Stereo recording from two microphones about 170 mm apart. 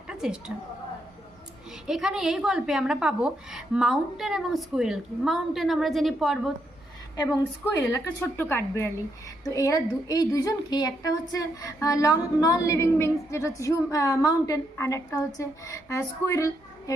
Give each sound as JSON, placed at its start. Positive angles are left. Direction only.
{"t": 0.1, "sound": "a woman's voice", "side_deg": -5}
{"t": 1.9, "sound": "a woman's voice", "side_deg": -5}
{"t": 7.6, "sound": "a woman's voice", "side_deg": 15}